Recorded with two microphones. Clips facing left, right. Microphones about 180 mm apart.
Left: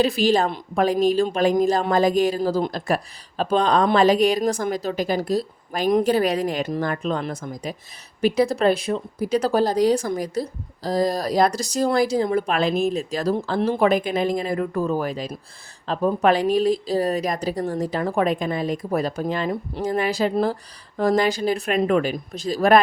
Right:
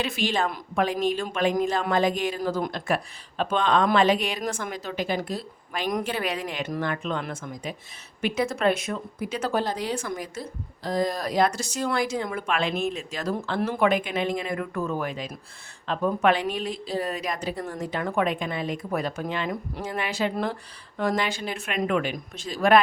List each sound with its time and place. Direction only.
0.0 s speech: 35° left (ahead or behind)